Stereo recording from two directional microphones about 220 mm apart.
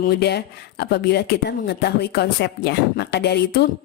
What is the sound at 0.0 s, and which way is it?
Speech, 50° left (ahead or behind).